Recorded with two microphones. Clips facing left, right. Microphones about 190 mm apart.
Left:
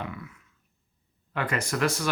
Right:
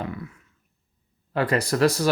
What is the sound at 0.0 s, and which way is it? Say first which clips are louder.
Grunt: right 5 dB; 35° right (ahead or behind).